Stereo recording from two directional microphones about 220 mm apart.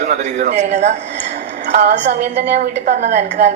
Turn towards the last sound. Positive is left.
turn(degrees=-30)  # may be behind; listen again after turning